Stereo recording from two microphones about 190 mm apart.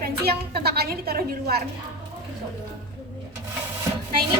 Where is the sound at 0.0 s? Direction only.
55° right (ahead or behind).